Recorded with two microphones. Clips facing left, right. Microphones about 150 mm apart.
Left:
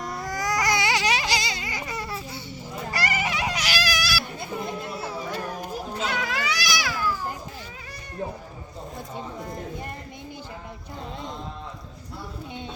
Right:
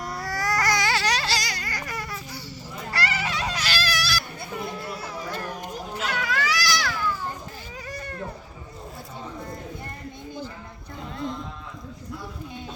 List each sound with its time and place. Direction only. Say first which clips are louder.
0.1 s baby cry: even; 20° left (ahead or behind)
2.9 s music: left 1 dB; 15° left (ahead or behind)
4.4 s children playing: left 2 dB; 25° left (ahead or behind)
6.1 s baby cry: right 2 dB; 20° left (ahead or behind)